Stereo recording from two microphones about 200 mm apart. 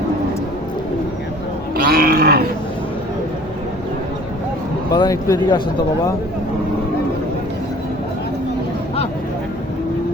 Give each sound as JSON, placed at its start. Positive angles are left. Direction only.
{"t": 1.7, "sound": "livestock", "side_deg": -50}
{"t": 4.9, "sound": "speech", "side_deg": 20}